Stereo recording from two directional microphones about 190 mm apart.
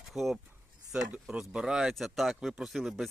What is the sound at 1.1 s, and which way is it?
Speech, 5° right (ahead or behind).